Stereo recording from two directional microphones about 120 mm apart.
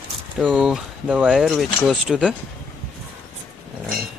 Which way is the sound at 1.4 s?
Centre (ahead or behind).